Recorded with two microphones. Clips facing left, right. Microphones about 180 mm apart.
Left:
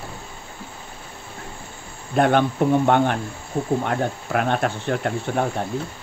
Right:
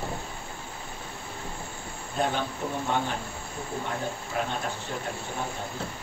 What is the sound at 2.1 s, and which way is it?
Speech, 70° left (ahead or behind).